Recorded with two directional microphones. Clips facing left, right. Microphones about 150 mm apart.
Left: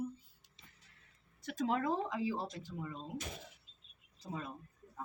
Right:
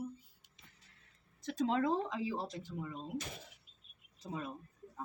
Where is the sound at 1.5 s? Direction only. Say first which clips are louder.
Right 2 dB; 25° right (ahead or behind).